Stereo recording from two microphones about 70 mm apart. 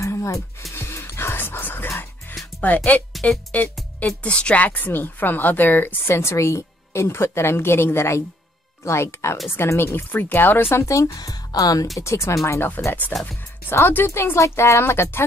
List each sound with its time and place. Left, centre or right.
0.0 s a sound: left
0.7 s music: left
2.7 s speech: left
3.1 s music: centre
4.0 s a woman's voice: centre; by 10.9 s left
10.9 s speech: left
11.1 s speech: left
12.0 s speech: left
12.4 s a woman's voice: left